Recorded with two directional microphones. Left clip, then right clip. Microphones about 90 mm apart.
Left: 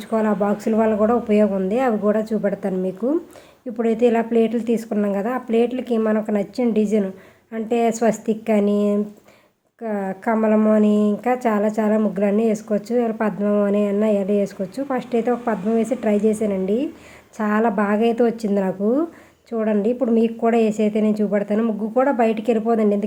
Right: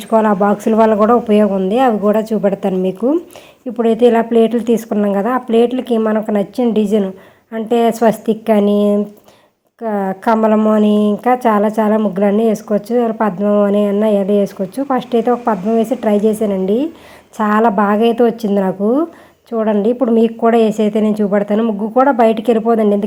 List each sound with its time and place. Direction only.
0.1 s speech: 50° right (ahead or behind)
2.4 s speech: 50° right (ahead or behind)
2.8 s a woman's voice: 35° right (ahead or behind)
11.9 s a woman's voice: 20° right (ahead or behind)
14.0 s a woman's voice: 30° right (ahead or behind)
16.6 s a woman's voice: 30° right (ahead or behind)